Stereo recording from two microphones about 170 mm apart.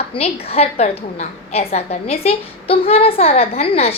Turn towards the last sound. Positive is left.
turn(degrees=35)  # may be behind; listen again after turning